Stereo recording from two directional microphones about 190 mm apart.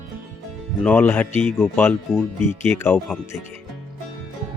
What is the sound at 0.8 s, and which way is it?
Speech, 5° left (ahead or behind).